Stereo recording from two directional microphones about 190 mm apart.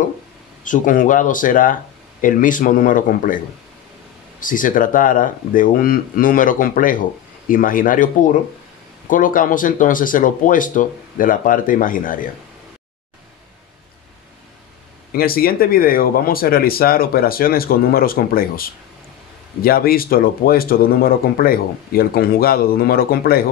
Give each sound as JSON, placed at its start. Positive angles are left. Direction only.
{"t": 0.7, "sound": "speech", "side_deg": 45}
{"t": 4.4, "sound": "speech", "side_deg": 45}
{"t": 15.1, "sound": "speech", "side_deg": 50}